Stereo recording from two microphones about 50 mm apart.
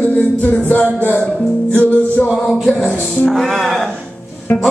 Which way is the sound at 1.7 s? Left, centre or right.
Left.